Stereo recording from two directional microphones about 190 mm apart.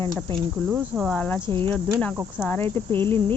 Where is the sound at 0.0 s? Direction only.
25° right (ahead or behind).